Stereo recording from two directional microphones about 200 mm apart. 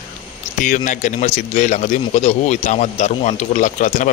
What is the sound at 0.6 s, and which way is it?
A man's voice, 40° left (ahead or behind).